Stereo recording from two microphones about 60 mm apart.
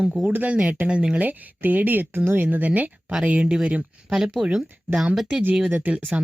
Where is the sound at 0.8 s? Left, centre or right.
Centre.